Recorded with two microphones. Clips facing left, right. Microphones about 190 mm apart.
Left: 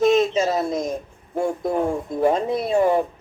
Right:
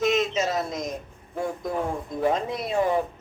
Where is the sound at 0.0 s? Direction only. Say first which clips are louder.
Left 6 dB; 30° left (ahead or behind).